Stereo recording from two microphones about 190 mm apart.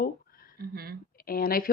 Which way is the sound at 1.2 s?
50° left (ahead or behind).